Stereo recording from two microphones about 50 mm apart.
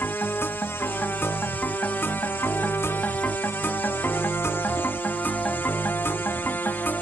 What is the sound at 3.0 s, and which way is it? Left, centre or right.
Music, left.